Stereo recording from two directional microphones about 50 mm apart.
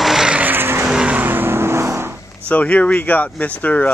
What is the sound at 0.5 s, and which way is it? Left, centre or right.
Vehicle, right.